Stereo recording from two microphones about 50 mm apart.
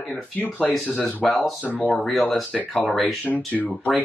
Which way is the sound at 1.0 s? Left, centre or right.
Left.